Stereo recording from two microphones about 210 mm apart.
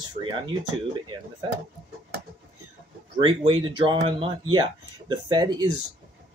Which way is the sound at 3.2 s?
20° right (ahead or behind).